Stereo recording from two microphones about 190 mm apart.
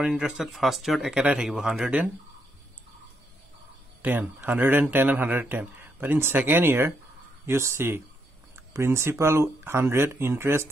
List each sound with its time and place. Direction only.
0.0 s speech: centre (ahead or behind)
4.0 s speech: 10° right (ahead or behind)